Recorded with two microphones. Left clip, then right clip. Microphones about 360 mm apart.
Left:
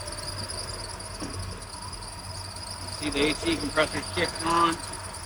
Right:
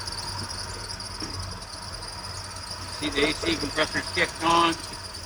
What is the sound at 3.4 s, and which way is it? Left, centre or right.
Cricket, centre.